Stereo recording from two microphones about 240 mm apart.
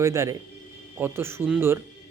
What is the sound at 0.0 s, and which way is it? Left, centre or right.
Speech, centre.